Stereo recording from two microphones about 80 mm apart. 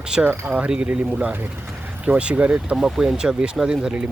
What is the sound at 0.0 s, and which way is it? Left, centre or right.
Speech, centre.